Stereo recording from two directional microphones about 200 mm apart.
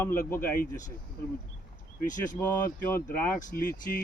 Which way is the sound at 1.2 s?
50° left (ahead or behind).